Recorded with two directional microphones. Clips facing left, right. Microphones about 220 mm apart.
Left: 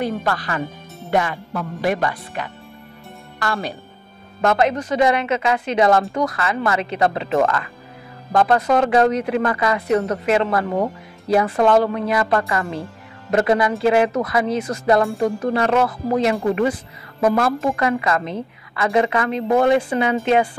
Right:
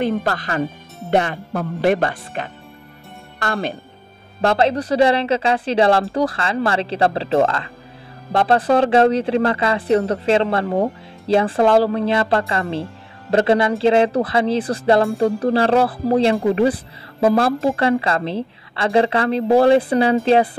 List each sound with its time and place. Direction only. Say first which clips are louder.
0.3 s a woman's voice: right 2 dB; 35° right (ahead or behind)
3.4 s a woman's voice: right 2 dB; 25° right (ahead or behind)